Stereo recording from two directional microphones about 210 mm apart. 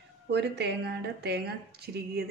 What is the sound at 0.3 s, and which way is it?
Speech, 50° right (ahead or behind).